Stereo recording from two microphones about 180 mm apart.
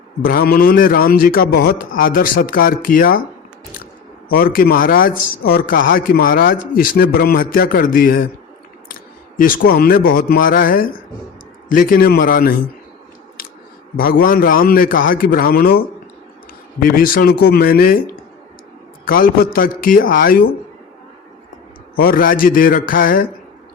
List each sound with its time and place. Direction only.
0.2 s a man's voice: 55° left (ahead or behind)
4.3 s a man's voice: 55° left (ahead or behind)
9.4 s a man's voice: 55° left (ahead or behind)
13.9 s a man's voice: 55° left (ahead or behind)
16.8 s a man's voice: 50° left (ahead or behind)
21.9 s a man's voice: 55° left (ahead or behind)